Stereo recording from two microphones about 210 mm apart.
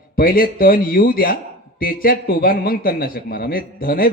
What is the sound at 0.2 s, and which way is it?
A man's voice, 45° left (ahead or behind).